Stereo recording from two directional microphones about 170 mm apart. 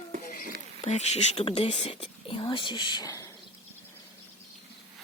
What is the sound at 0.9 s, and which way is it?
Speech, 40° left (ahead or behind).